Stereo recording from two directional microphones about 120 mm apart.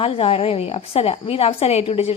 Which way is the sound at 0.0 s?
50° left (ahead or behind).